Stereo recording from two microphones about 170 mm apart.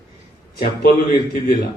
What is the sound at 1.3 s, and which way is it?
Speech, 60° left (ahead or behind).